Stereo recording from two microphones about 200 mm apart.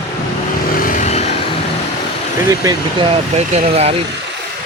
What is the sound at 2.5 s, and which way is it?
Speech, 20° right (ahead or behind).